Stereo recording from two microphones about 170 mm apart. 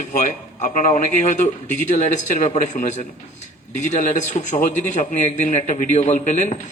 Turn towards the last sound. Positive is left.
turn(degrees=45)  # may be behind; listen again after turning